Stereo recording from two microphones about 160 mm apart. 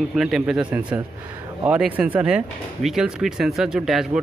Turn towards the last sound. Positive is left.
turn(degrees=-5)  # may be behind; listen again after turning